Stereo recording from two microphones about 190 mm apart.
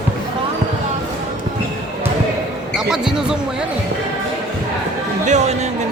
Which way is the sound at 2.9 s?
5° right (ahead or behind).